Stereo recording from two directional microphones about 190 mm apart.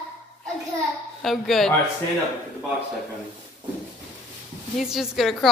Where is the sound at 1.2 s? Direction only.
Centre (ahead or behind).